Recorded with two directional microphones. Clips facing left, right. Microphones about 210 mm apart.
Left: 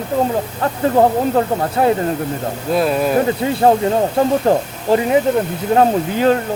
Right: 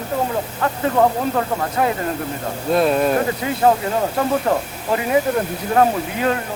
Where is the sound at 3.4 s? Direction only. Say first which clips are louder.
Left 4 dB; 30° left (ahead or behind).